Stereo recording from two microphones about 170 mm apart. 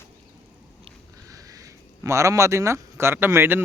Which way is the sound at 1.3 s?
20° right (ahead or behind).